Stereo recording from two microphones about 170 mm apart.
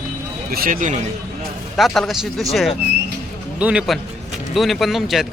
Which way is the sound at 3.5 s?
5° right (ahead or behind).